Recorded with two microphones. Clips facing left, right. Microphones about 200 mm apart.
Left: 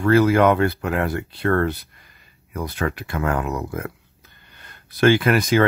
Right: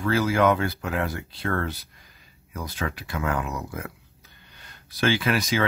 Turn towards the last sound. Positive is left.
turn(degrees=55)  # may be behind; listen again after turning